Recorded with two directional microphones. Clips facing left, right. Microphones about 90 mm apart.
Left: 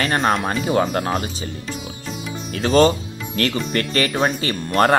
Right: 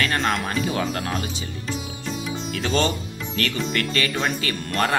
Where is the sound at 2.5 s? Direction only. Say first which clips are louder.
Left 8 dB; 40° left (ahead or behind).